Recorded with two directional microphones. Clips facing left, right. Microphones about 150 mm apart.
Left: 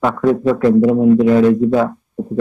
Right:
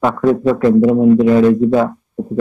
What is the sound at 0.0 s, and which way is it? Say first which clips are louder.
A man's voice: right 1 dB; 15° right (ahead or behind).